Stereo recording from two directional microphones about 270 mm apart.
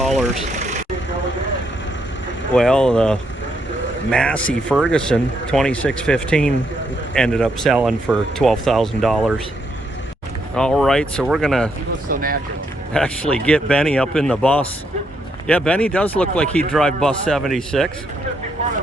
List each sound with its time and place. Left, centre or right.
0.0 s speech: centre
0.6 s vehicle: right
2.6 s a man's voice: centre
10.5 s a man's voice: centre
12.0 s speech: right
12.9 s a man's voice: centre